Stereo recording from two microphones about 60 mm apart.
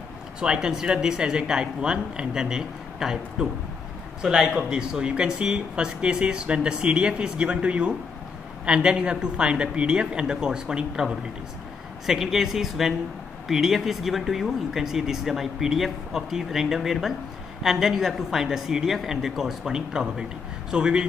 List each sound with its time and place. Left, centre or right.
0.4 s speech: centre